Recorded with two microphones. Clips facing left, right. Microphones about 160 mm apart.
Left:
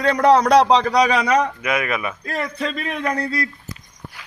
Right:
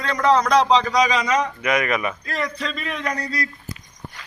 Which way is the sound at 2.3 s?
55° left (ahead or behind).